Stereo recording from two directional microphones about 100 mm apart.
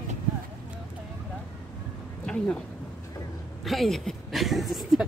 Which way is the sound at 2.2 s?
5° left (ahead or behind).